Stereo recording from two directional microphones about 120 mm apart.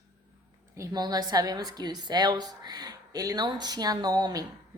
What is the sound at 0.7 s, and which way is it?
A woman's voice, 30° right (ahead or behind).